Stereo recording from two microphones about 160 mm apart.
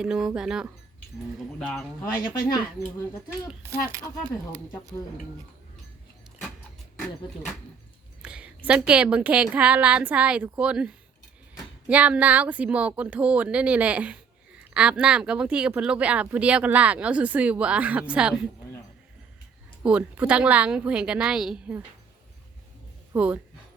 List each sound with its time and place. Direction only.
0.0 s speech: 5° right (ahead or behind)
3.6 s speech: 15° right (ahead or behind)
8.2 s speech: 5° right (ahead or behind)
19.8 s speech: 10° right (ahead or behind)
23.1 s speech: 10° right (ahead or behind)